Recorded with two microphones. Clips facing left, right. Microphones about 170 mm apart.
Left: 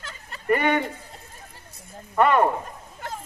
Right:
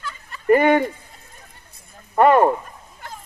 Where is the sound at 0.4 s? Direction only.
45° right (ahead or behind).